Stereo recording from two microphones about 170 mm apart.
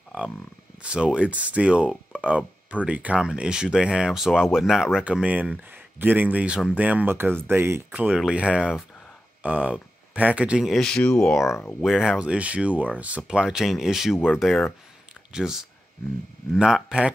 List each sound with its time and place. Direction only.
0.8 s speech: 5° right (ahead or behind)
11.4 s speech: 15° left (ahead or behind)
11.8 s speech: 5° right (ahead or behind)